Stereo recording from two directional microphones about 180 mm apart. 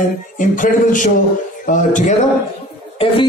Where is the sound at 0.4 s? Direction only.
45° left (ahead or behind).